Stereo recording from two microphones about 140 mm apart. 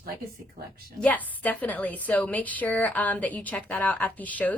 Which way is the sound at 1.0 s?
10° left (ahead or behind).